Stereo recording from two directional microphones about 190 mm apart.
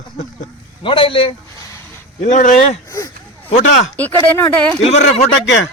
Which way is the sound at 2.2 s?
40° left (ahead or behind).